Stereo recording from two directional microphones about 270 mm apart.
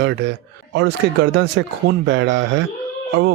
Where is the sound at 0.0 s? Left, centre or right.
Right.